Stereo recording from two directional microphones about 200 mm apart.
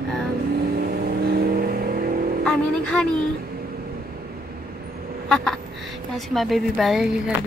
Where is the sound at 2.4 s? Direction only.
5° left (ahead or behind).